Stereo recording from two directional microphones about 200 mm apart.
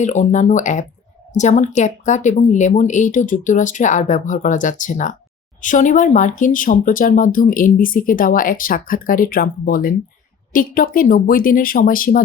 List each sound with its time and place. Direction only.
0.0 s speech: 35° left (ahead or behind)